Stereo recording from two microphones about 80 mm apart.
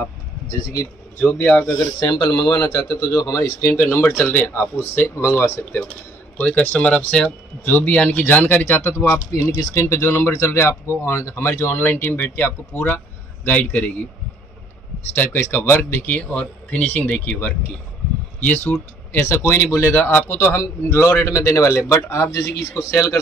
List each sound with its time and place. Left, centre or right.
1.2 s speech: centre
1.8 s speech: left
3.2 s speech: left
3.6 s speech: left; by 7.2 s centre
7.6 s speech: left
15.1 s speech: left
16.2 s speech: centre; by 23.2 s left